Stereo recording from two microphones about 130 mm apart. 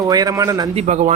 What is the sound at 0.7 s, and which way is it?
Speech, 60° right (ahead or behind).